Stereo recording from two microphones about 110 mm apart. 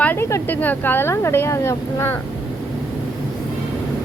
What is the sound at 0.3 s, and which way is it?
Speech, 25° left (ahead or behind).